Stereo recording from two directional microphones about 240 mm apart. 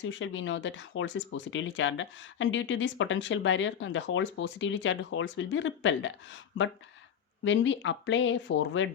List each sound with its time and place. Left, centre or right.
0.1 s speech: left